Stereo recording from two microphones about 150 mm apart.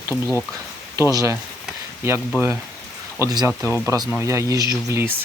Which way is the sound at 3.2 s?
20° right (ahead or behind).